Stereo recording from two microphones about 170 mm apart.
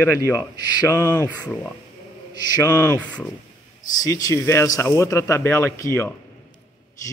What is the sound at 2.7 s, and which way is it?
Speech, 20° left (ahead or behind).